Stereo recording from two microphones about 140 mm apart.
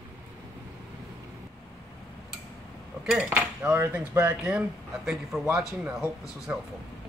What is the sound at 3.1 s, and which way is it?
Dishes, 5° right (ahead or behind).